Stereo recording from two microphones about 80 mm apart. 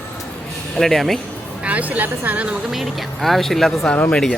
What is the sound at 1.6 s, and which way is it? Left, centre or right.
Speech, centre.